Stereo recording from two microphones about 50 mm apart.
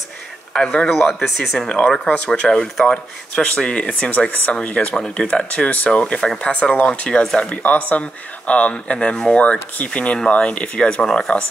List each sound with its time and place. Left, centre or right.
0.5 s speech: centre
0.8 s speech: centre
1.4 s speech: centre; by 4.6 s left
4.8 s speech: centre
5.3 s speech: left
8.9 s speech: centre